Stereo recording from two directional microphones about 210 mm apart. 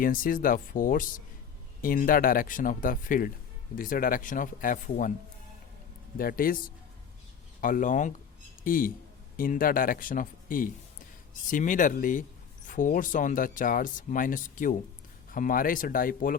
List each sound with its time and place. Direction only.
0.0 s speech: 40° left (ahead or behind)
6.1 s speech: 45° left (ahead or behind)
7.6 s speech: 40° left (ahead or behind)